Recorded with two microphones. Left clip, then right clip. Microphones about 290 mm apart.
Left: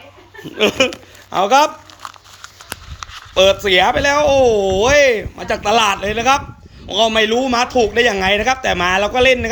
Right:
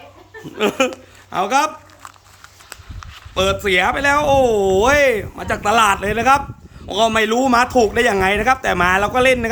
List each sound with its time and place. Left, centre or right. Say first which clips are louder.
0.5 s a woman's voice: left 3 dB; centre
2.4 s a sound: left 7 dB; left
3.3 s speech: left 5 dB; centre